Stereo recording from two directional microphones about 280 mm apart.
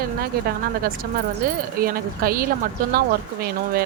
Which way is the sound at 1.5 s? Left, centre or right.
Right.